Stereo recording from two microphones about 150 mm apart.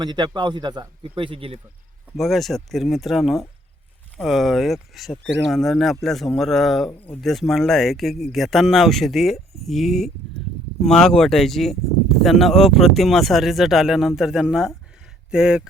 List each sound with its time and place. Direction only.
0.0 s speech: 30° right (ahead or behind)
2.1 s speech: centre (ahead or behind)